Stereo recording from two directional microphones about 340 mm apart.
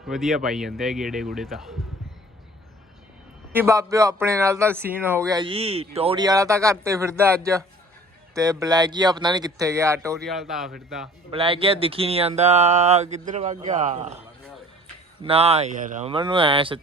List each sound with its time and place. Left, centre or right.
0.1 s speech: centre
3.5 s speech: centre
11.3 s speech: centre